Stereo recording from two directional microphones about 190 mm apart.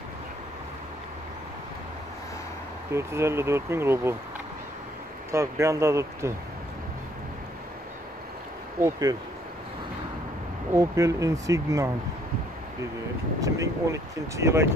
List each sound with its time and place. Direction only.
2.9 s speech: 15° right (ahead or behind)
5.3 s speech: 15° right (ahead or behind)
10.7 s speech: 15° right (ahead or behind)
13.4 s speech: 15° right (ahead or behind)